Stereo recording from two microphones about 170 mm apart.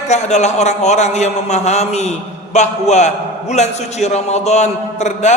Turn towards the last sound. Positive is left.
turn(degrees=45)  # may be behind; listen again after turning